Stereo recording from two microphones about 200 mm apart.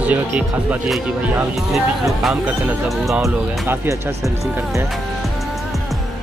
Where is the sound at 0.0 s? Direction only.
5° right (ahead or behind).